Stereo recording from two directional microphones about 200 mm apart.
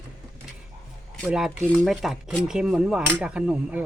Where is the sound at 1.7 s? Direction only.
Centre (ahead or behind).